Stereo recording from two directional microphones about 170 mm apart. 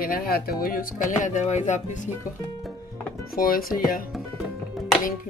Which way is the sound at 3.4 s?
60° left (ahead or behind).